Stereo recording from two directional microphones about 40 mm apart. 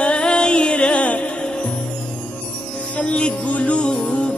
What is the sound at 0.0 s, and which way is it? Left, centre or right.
Music, left.